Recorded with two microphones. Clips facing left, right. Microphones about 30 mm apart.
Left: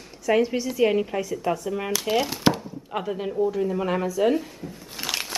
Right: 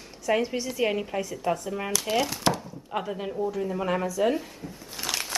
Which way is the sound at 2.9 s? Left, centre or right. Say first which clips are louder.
Left 3 dB; centre.